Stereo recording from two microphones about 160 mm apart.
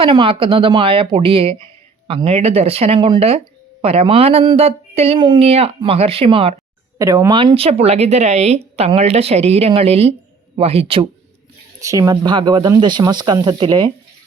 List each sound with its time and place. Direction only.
0.0 s speech: 35° right (ahead or behind)
7.0 s speech: 20° right (ahead or behind); by 11.0 s 35° right (ahead or behind)
11.8 s speech: 20° right (ahead or behind)